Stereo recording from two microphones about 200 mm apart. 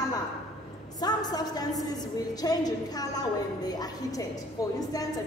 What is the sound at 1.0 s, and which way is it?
A woman's voice, 20° left (ahead or behind).